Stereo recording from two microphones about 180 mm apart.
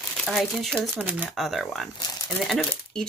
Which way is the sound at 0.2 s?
Centre (ahead or behind).